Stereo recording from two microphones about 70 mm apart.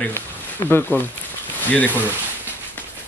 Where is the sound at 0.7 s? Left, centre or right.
Left.